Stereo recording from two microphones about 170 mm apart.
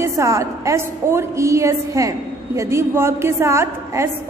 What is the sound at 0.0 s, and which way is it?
A woman's voice, 15° right (ahead or behind).